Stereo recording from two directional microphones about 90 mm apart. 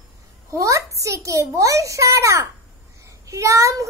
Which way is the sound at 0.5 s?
35° right (ahead or behind).